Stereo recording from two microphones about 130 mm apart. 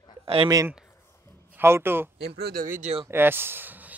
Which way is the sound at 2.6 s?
90° right.